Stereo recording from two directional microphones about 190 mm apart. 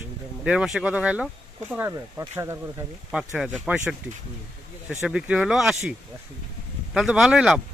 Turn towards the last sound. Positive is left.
turn(degrees=-5)  # may be behind; listen again after turning